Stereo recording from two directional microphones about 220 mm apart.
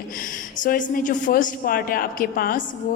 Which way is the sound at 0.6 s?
40° left (ahead or behind).